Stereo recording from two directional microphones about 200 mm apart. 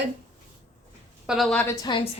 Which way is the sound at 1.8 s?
25° left (ahead or behind).